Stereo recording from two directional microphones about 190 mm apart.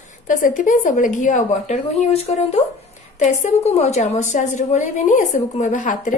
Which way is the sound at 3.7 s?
35° left (ahead or behind).